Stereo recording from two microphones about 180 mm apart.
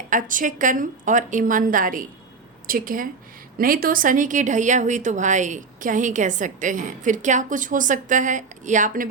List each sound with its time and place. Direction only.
0.1 s speech: 50° right (ahead or behind)